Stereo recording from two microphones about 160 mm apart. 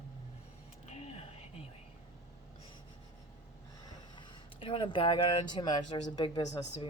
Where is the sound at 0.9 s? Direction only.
45° left (ahead or behind).